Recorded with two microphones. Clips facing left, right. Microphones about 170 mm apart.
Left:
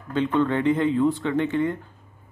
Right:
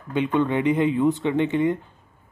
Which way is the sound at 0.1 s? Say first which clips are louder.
Even; 15° right (ahead or behind).